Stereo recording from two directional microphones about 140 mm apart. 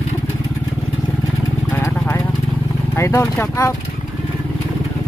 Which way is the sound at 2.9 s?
20° left (ahead or behind).